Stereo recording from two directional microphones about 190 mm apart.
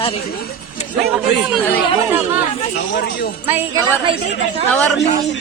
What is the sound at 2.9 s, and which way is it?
Speech, 60° left (ahead or behind).